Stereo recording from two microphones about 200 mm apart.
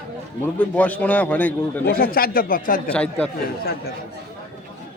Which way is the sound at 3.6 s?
50° left (ahead or behind).